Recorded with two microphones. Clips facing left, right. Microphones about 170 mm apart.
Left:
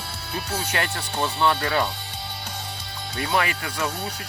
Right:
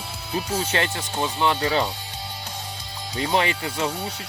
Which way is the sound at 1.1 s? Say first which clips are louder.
Left 1 dB; 15° right (ahead or behind).